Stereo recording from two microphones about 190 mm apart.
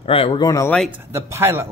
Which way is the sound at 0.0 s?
30° left (ahead or behind).